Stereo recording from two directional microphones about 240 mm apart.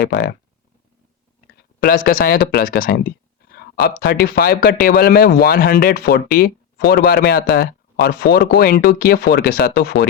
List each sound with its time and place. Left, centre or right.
0.0 s speech: left
1.5 s speech: left